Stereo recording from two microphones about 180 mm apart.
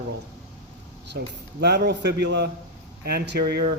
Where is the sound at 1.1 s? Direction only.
65° right (ahead or behind).